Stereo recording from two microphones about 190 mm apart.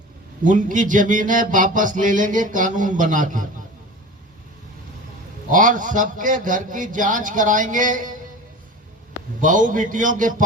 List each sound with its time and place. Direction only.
0.4 s speech: 45° right (ahead or behind)
5.5 s speech: 45° right (ahead or behind)
9.4 s speech: 45° right (ahead or behind)